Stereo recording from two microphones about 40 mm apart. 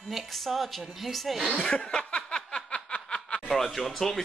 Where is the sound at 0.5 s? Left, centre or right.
Centre.